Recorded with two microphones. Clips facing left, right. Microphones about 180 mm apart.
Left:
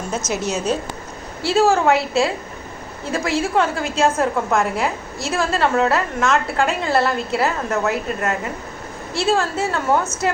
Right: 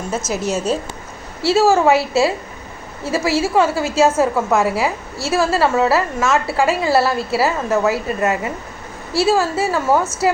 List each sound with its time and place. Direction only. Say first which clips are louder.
0.3 s a woman's voice: right 2 dB; 5° right (ahead or behind)